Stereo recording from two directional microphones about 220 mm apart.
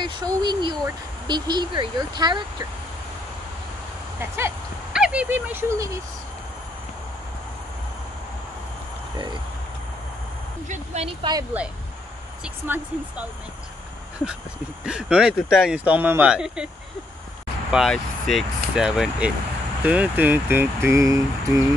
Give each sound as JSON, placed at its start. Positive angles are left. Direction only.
{"t": 0.0, "sound": "speech", "side_deg": -20}
{"t": 4.9, "sound": "speech", "side_deg": -5}
{"t": 10.7, "sound": "speech", "side_deg": -30}
{"t": 12.6, "sound": "speech", "side_deg": -10}
{"t": 14.9, "sound": "speech", "side_deg": -5}
{"t": 17.6, "sound": "speech", "side_deg": 0}